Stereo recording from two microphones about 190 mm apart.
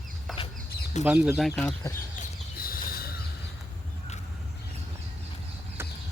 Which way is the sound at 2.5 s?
50° left (ahead or behind).